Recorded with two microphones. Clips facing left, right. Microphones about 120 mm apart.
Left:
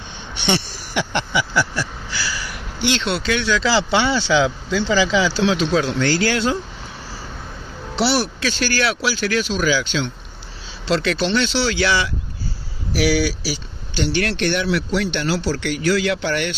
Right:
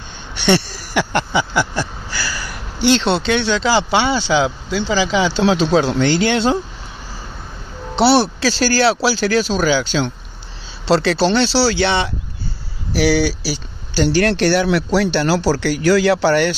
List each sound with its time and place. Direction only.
0.5 s a sound: 45° right (ahead or behind)
1.3 s speech: 25° right (ahead or behind)
2.0 s speech: 45° right (ahead or behind); by 5.4 s 20° right (ahead or behind)
5.4 s speech: 30° right (ahead or behind)
7.9 s speech: 30° right (ahead or behind)
13.4 s a sound: 30° right (ahead or behind)
14.0 s speech: 40° right (ahead or behind)